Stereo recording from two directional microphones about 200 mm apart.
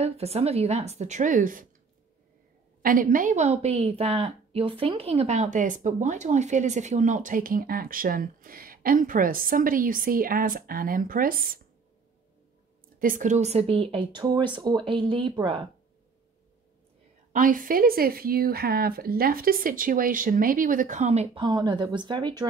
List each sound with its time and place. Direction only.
0.0 s a woman's voice: 30° right (ahead or behind)
2.8 s a woman's voice: 45° right (ahead or behind)
13.0 s speech: 40° right (ahead or behind); by 15.6 s 25° right (ahead or behind)
17.3 s a woman's voice: 40° right (ahead or behind)
21.3 s speech: 20° right (ahead or behind)